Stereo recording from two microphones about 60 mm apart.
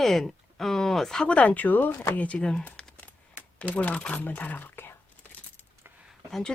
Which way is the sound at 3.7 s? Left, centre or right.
Left.